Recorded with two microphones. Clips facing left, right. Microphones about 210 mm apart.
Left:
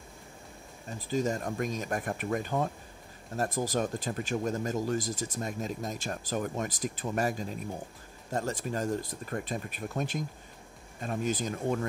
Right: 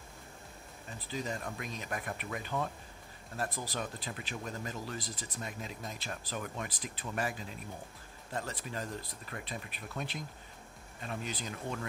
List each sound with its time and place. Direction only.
0.8 s speech: 45° left (ahead or behind)